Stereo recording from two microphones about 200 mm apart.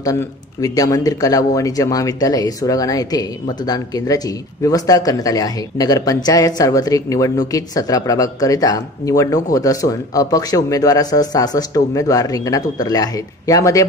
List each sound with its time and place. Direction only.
0.0 s speech: 15° left (ahead or behind)